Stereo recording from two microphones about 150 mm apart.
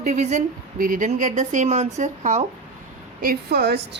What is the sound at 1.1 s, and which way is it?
Speech, 55° right (ahead or behind).